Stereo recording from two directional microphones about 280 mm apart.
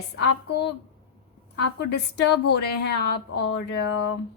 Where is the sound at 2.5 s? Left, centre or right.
Left.